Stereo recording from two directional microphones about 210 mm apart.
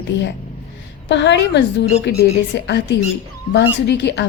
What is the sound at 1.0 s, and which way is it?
A woman's voice, 55° left (ahead or behind).